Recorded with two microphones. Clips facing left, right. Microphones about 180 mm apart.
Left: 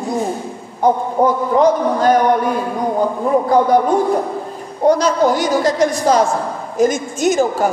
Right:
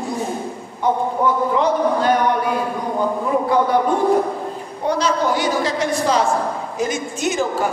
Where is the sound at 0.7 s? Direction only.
40° left (ahead or behind).